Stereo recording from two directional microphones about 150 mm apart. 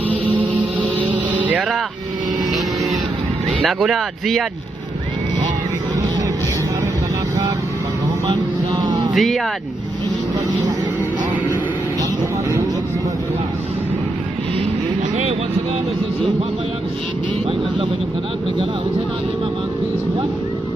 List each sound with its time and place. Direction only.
1.1 s music: 10° right (ahead or behind)
3.6 s speech: centre (ahead or behind)
8.3 s vehicle: 30° right (ahead or behind)
9.1 s speech: centre (ahead or behind)